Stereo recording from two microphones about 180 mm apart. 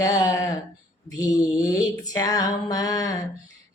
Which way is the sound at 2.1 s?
20° left (ahead or behind).